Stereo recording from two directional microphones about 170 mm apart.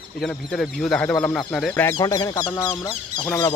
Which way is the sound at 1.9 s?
20° left (ahead or behind).